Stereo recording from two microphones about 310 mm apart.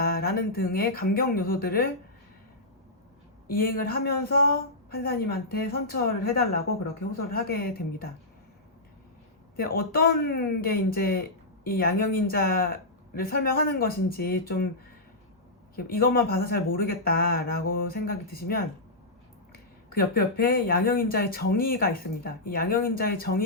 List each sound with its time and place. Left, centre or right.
0.0 s speech: left
3.4 s speech: left
9.6 s speech: left
15.7 s speech: left
19.9 s speech: left